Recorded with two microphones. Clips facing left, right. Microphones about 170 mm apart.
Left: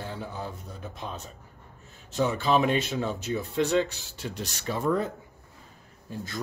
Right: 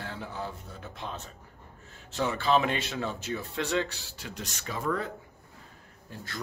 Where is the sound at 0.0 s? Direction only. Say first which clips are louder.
Left 3 dB; 15° left (ahead or behind).